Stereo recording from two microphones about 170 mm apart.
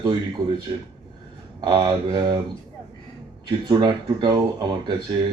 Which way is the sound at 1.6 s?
30° right (ahead or behind).